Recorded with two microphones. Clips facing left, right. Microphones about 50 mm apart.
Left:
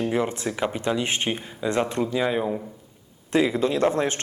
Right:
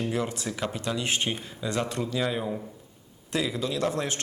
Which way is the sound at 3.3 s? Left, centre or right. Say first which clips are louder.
Left 7 dB; left.